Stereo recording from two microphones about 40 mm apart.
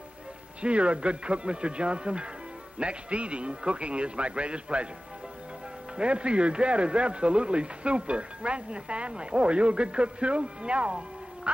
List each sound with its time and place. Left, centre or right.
0.6 s speech: right
5.9 s speech: right